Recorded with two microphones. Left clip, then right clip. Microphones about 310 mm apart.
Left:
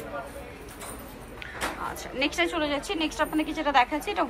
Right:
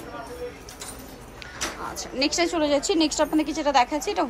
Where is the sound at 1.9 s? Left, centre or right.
Centre.